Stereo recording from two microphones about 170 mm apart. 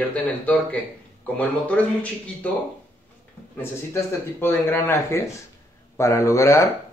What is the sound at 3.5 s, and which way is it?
Speech, 15° left (ahead or behind).